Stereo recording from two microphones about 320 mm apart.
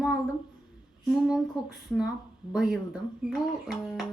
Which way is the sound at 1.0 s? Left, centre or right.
Centre.